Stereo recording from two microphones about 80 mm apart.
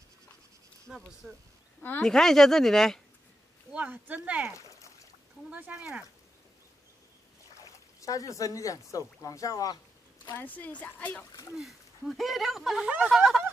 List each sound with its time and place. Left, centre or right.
0.8 s speech: centre
3.7 s speech: centre
4.6 s a sound: left
5.5 s speech: centre
8.0 s speech: left
10.3 s a woman's voice: left
11.5 s speech: centre